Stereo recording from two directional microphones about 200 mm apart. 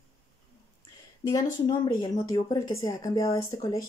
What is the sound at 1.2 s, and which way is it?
Speech, 15° left (ahead or behind).